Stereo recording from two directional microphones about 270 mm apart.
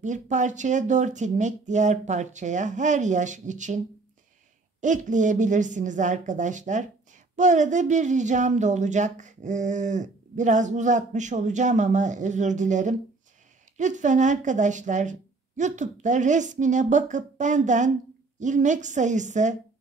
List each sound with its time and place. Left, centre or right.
0.0 s speech: right